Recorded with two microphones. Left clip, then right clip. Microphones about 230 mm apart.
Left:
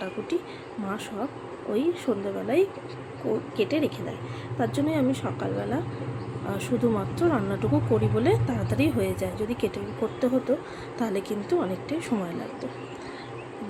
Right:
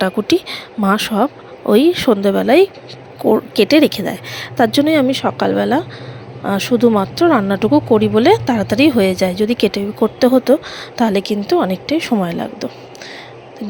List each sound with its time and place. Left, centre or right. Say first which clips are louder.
0.0 s a woman's voice: right 15 dB; right